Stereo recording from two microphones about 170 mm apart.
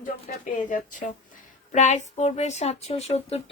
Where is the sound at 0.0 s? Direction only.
50° left (ahead or behind).